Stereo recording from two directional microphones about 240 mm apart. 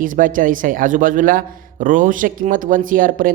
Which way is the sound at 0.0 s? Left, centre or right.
Right.